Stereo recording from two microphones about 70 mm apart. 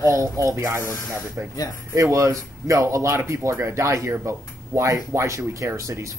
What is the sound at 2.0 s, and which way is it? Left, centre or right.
Speech, right.